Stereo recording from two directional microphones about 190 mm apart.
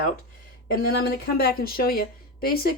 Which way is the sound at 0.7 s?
55° left (ahead or behind).